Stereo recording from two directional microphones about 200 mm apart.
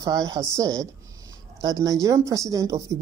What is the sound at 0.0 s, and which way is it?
Speech, 20° right (ahead or behind).